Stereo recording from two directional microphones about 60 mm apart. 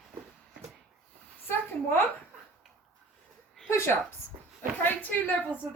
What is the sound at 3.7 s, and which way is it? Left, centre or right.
Speech, left.